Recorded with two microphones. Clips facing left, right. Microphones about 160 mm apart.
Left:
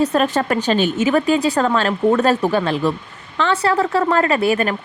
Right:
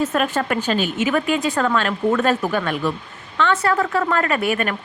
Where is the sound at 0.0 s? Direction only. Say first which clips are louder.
Left 4 dB; 35° left (ahead or behind).